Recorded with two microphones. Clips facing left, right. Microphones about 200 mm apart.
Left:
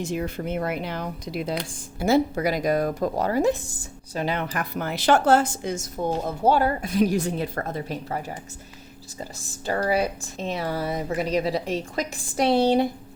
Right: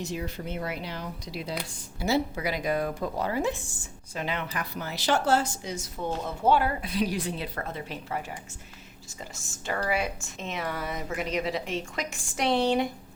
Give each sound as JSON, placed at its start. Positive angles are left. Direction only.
{"t": 0.0, "sound": "speech", "side_deg": 50}
{"t": 9.4, "sound": "speech", "side_deg": 35}